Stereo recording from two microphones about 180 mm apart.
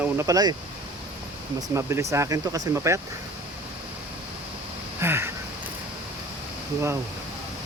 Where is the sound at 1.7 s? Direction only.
15° right (ahead or behind).